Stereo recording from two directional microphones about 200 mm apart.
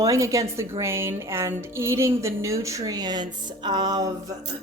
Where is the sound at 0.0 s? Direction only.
15° right (ahead or behind).